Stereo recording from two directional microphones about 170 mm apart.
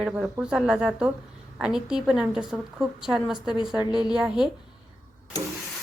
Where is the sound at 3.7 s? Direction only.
25° left (ahead or behind).